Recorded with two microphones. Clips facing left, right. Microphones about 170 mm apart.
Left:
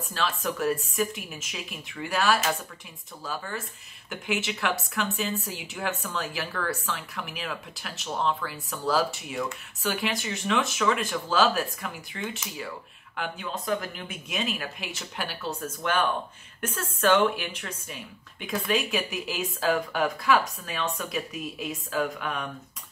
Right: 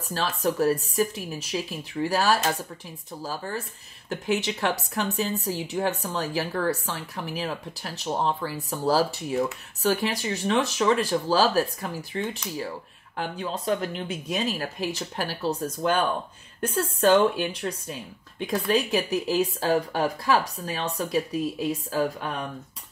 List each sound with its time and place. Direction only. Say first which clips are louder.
0.1 s a woman's voice: right 4 dB; 40° right (ahead or behind)